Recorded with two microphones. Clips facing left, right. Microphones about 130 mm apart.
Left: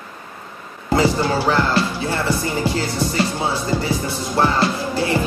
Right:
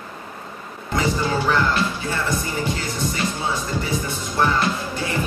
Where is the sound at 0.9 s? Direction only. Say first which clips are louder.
Left 5 dB; 30° left (ahead or behind).